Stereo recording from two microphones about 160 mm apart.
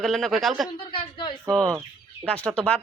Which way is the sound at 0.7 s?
30° left (ahead or behind).